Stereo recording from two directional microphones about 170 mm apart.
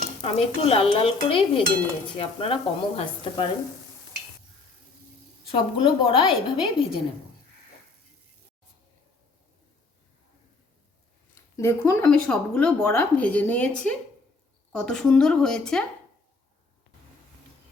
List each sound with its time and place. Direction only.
0.2 s a woman's voice: 35° left (ahead or behind)
5.5 s a woman's voice: 30° left (ahead or behind)
11.5 s a woman's voice: 15° left (ahead or behind)